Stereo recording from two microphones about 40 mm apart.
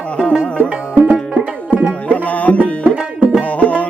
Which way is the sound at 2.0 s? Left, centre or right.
Left.